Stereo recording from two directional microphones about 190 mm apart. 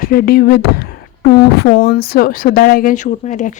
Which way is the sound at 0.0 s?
50° left (ahead or behind).